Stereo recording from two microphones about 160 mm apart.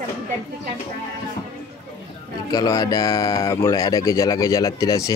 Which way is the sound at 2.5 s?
25° left (ahead or behind).